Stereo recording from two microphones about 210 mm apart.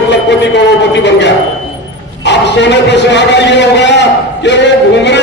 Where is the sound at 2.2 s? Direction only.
55° left (ahead or behind).